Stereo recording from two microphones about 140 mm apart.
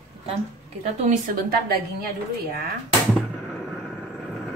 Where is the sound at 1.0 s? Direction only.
75° right (ahead or behind).